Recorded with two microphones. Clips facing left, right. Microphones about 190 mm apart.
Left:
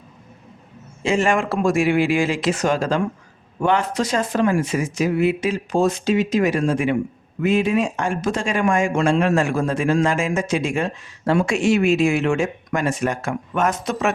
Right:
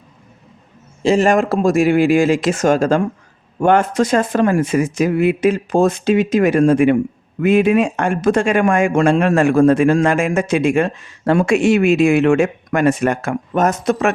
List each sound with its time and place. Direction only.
1.0 s speech: 35° right (ahead or behind); by 13.3 s 60° right (ahead or behind)
13.5 s speech: 40° right (ahead or behind)